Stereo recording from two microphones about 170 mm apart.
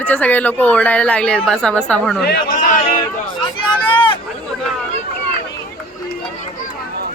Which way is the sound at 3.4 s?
30° left (ahead or behind).